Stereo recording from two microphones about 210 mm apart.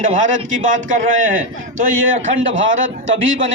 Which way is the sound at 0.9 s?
40° right (ahead or behind).